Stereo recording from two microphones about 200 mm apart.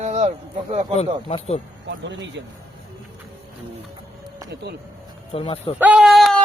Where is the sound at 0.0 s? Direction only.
35° right (ahead or behind).